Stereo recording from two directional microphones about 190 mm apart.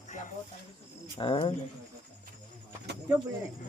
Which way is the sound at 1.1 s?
25° left (ahead or behind).